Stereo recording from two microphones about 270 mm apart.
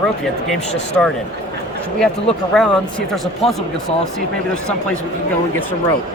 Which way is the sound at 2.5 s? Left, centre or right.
Centre.